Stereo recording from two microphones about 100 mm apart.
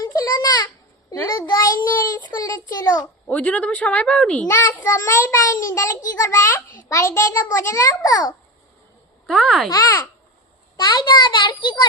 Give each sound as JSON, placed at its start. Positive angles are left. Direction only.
{"t": 0.0, "sound": "a sound", "side_deg": 40}
{"t": 1.3, "sound": "a child's voice", "side_deg": 40}
{"t": 3.2, "sound": "a woman's voice", "side_deg": 15}
{"t": 4.4, "sound": "a child's voice", "side_deg": 20}
{"t": 9.2, "sound": "speech", "side_deg": 5}
{"t": 9.6, "sound": "a child's voice", "side_deg": 40}